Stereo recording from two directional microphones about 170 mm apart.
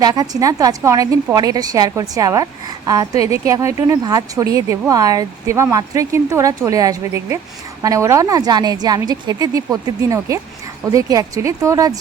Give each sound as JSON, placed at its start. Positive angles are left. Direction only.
{"t": 0.0, "sound": "a woman's voice", "side_deg": -20}